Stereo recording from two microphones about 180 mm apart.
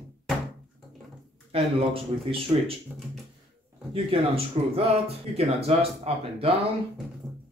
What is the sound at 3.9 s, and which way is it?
Speech, 35° right (ahead or behind).